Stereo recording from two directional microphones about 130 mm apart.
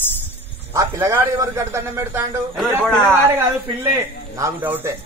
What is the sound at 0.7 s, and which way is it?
A man's voice, 20° right (ahead or behind).